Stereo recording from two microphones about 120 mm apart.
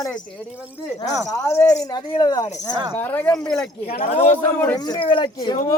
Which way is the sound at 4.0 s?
70° left (ahead or behind).